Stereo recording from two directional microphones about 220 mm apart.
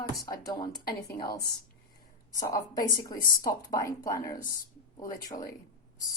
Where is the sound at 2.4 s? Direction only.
15° left (ahead or behind).